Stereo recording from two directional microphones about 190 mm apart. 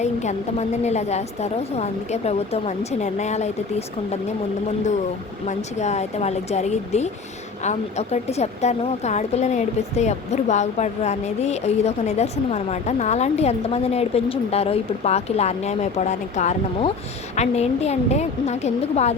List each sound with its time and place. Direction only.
0.0 s speech: 35° left (ahead or behind)
5.5 s speech: 35° left (ahead or behind)